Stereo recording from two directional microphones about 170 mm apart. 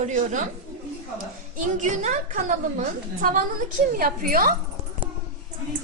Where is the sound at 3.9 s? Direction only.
55° right (ahead or behind).